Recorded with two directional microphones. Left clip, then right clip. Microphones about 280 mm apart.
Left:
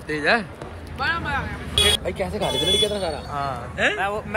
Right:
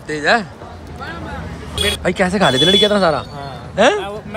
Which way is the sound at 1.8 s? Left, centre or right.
Right.